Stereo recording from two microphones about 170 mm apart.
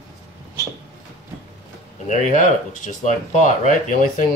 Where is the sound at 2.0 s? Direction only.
45° left (ahead or behind).